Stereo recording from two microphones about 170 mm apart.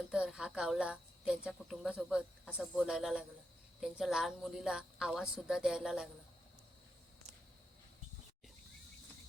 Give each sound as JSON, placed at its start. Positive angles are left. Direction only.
{"t": 0.1, "sound": "a woman's voice", "side_deg": -5}